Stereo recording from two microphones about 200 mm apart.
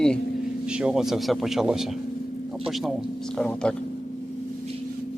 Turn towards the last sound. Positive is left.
turn(degrees=5)  # may be behind; listen again after turning